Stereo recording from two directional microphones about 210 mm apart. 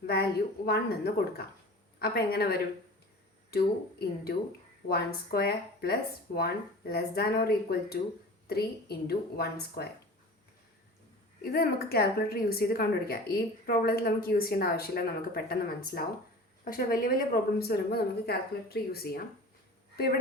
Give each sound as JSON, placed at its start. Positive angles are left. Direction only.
{"t": 0.1, "sound": "a woman's voice", "side_deg": 50}
{"t": 11.5, "sound": "a woman's voice", "side_deg": 45}